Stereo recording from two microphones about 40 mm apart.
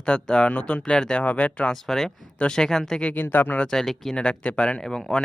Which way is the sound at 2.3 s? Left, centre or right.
Left.